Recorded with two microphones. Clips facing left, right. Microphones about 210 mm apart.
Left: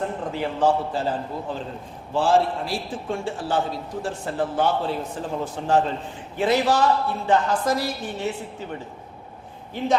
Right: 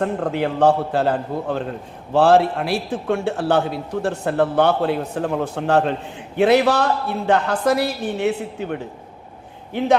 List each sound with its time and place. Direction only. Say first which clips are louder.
0.0 s a man's voice: right 6 dB; 70° right (ahead or behind)